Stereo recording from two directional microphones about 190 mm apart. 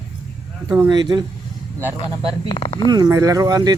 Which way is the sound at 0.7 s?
20° right (ahead or behind).